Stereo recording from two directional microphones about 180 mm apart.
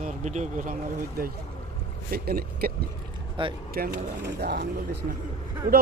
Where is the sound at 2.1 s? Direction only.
60° right (ahead or behind).